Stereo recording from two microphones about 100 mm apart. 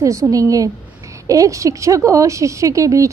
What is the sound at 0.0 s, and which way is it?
A woman's voice, 30° right (ahead or behind).